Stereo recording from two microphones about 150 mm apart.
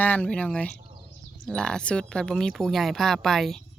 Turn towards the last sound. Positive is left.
turn(degrees=0)  # may be behind; listen again after turning